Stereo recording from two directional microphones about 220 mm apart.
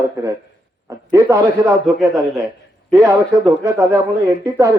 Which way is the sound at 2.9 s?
15° right (ahead or behind).